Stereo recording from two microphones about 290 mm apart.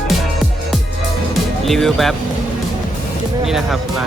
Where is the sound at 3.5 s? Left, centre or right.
Centre.